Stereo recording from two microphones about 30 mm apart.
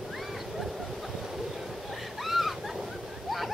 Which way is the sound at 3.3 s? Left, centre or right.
Centre.